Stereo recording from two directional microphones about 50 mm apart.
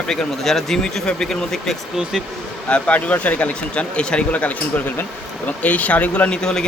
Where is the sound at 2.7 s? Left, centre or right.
Left.